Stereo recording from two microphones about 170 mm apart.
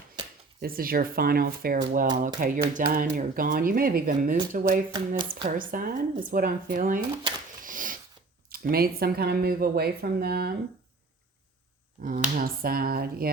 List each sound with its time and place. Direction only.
0.6 s speech: 60° right (ahead or behind)
4.9 s speech: 25° right (ahead or behind)
5.5 s speech: 55° right (ahead or behind)
7.6 s snort: 50° right (ahead or behind)
8.4 s speech: 60° right (ahead or behind)
12.0 s speech: 55° right (ahead or behind)